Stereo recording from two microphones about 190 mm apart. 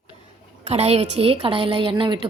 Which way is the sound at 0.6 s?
35° right (ahead or behind).